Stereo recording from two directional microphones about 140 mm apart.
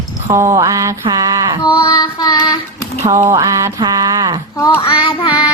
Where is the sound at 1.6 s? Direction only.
30° left (ahead or behind).